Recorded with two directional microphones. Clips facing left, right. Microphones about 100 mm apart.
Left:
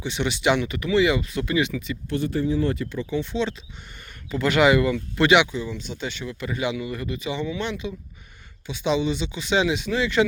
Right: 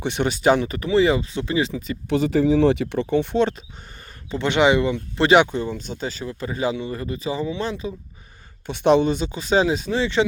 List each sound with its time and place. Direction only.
0.0 s speech: 50° right (ahead or behind); by 2.0 s 30° right (ahead or behind)
2.0 s speech: 90° right; by 3.5 s 55° right (ahead or behind)
4.3 s speech: 25° right (ahead or behind)
8.6 s speech: 55° right (ahead or behind); by 10.2 s 30° right (ahead or behind)